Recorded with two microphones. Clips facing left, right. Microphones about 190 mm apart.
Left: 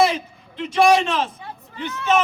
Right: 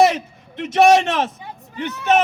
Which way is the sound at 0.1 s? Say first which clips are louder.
Right 2 dB; 70° right (ahead or behind).